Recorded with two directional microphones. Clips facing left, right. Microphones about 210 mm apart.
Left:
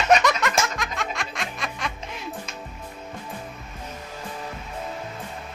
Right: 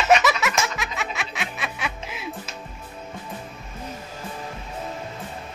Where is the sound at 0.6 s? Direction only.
5° right (ahead or behind).